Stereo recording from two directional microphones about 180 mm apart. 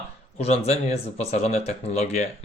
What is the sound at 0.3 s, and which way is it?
Speech, 35° left (ahead or behind).